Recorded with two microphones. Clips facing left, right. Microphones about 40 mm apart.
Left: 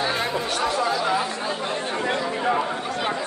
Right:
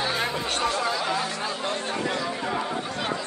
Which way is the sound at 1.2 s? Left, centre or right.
Left.